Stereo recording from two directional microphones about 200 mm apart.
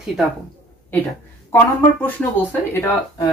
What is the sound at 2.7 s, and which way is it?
Speech, 15° left (ahead or behind).